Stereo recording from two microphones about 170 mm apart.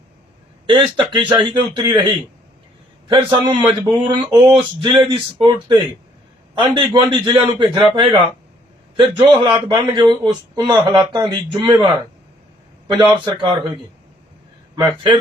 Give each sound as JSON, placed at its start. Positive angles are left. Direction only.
{"t": 0.7, "sound": "speech", "side_deg": -30}
{"t": 3.1, "sound": "speech", "side_deg": -30}
{"t": 9.0, "sound": "speech", "side_deg": -25}
{"t": 14.8, "sound": "speech", "side_deg": -25}